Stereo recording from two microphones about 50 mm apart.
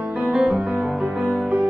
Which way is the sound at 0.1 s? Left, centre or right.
Right.